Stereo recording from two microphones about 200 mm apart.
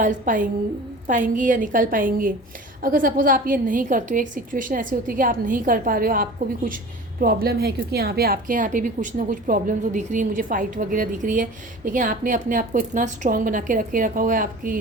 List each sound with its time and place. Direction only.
0.0 s a woman's voice: 40° right (ahead or behind)